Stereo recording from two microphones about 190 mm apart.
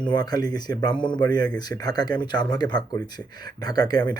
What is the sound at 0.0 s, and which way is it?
Speech, 20° left (ahead or behind).